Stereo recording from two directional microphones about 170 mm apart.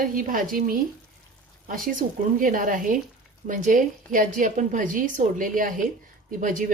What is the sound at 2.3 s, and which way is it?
A woman's voice, 55° right (ahead or behind).